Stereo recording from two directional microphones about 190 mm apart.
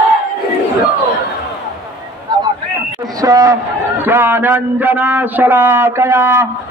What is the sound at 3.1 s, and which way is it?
A man's voice, 20° right (ahead or behind).